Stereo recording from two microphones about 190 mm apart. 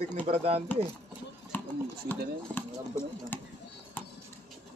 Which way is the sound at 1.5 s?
10° left (ahead or behind).